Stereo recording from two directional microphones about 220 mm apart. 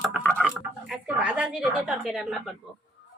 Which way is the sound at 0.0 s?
5° right (ahead or behind).